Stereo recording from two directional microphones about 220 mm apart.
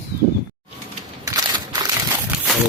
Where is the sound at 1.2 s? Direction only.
15° right (ahead or behind).